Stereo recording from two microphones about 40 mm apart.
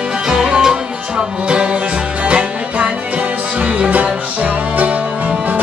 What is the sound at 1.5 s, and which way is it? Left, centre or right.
Music, right.